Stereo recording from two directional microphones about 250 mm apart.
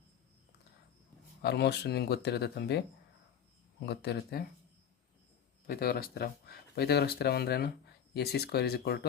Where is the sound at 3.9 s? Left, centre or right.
Left.